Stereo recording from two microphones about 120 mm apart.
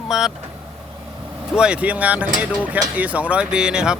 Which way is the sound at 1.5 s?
10° right (ahead or behind).